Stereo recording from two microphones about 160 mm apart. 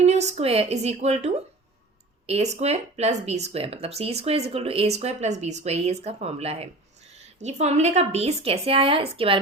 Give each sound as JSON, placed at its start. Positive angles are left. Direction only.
{"t": 0.0, "sound": "a woman's voice", "side_deg": -45}